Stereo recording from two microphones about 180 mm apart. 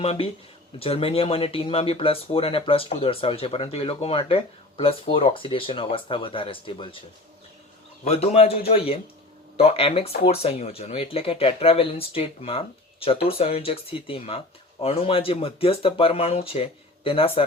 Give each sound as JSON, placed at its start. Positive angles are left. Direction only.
{"t": 0.0, "sound": "speech", "side_deg": 35}
{"t": 8.0, "sound": "speech", "side_deg": 35}